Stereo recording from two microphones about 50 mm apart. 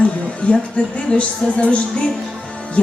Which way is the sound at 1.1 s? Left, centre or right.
Left.